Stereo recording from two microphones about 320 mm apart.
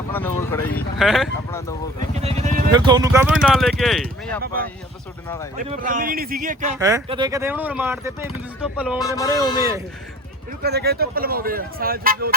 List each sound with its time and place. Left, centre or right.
0.1 s speech: centre
2.1 s speech: right
3.4 s speech: centre
5.6 s speech: right
6.7 s speech: centre
9.0 s speech: centre
10.6 s speech: right